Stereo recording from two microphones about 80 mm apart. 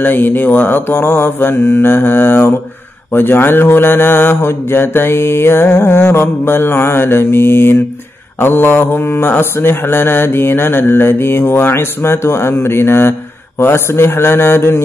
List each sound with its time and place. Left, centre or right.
0.0 s mantra: left
13.6 s speech: left